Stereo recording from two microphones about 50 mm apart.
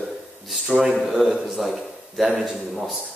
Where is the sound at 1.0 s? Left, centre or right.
Centre.